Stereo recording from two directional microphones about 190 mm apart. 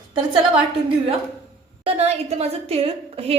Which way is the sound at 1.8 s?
35° right (ahead or behind).